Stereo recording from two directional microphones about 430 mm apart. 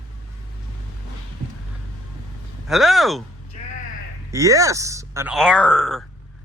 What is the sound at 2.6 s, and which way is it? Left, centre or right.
Speech, centre.